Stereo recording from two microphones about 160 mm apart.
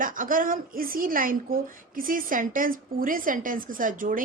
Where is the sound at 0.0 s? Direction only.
55° right (ahead or behind).